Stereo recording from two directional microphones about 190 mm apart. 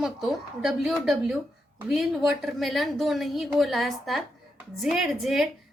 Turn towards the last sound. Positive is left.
turn(degrees=0)  # may be behind; listen again after turning